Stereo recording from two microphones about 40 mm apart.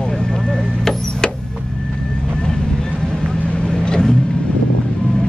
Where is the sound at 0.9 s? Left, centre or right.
Centre.